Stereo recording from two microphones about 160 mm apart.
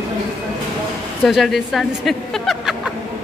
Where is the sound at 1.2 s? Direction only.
Centre (ahead or behind).